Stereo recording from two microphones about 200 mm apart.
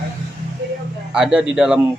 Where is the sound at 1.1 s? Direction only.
5° right (ahead or behind).